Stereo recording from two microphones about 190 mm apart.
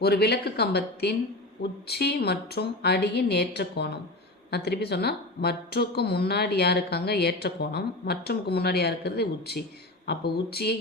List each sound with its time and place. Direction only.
0.0 s speech: 55° left (ahead or behind)